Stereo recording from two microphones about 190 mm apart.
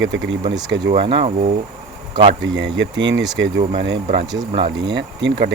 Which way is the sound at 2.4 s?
70° right (ahead or behind).